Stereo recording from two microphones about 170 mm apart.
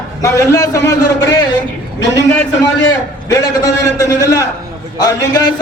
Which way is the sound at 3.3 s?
20° left (ahead or behind).